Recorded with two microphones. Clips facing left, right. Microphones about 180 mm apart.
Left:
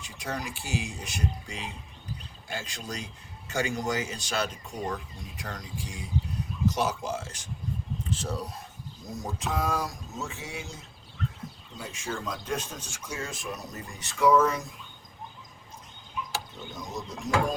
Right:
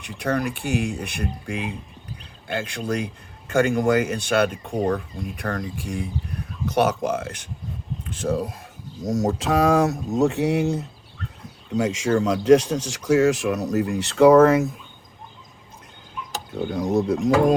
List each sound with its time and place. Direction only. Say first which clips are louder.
0.0 s a man's voice: right 11 dB; 60° right (ahead or behind)
9.0 s a man's voice: right 12 dB; 90° right; by 10.8 s 65° right (ahead or behind)
11.7 s speech: right 16 dB; 90° right; by 14.7 s 60° right (ahead or behind)
16.6 s a man's voice: right 16 dB; 60° right (ahead or behind)